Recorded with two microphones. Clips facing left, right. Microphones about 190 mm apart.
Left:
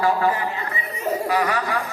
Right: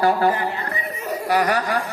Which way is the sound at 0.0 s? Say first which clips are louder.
Right 2 dB; 35° right (ahead or behind).